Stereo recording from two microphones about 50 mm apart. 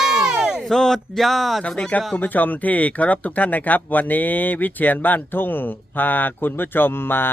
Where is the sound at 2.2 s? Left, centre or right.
Left.